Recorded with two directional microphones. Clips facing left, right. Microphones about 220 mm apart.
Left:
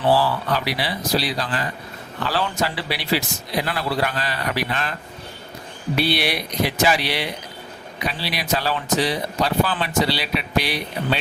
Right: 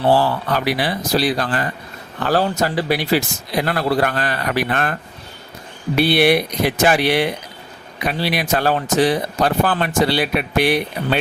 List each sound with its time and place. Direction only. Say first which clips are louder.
0.1 s speech: right 2 dB; 50° right (ahead or behind)
6.0 s speech: right 8 dB; 55° right (ahead or behind)